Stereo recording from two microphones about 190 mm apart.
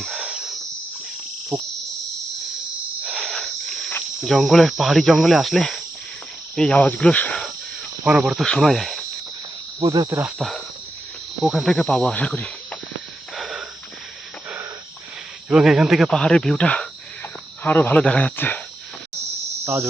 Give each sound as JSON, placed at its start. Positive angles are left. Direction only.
{"t": 0.0, "sound": "cricket", "side_deg": 0}
{"t": 3.0, "sound": "cricket", "side_deg": -5}
{"t": 8.0, "sound": "cricket", "side_deg": -5}
{"t": 9.8, "sound": "speech", "side_deg": -20}
{"t": 10.2, "sound": "cricket", "side_deg": -5}
{"t": 13.3, "sound": "a sound", "side_deg": 0}
{"t": 15.4, "sound": "cricket", "side_deg": -5}
{"t": 17.6, "sound": "speech", "side_deg": 10}
{"t": 19.6, "sound": "cricket", "side_deg": -15}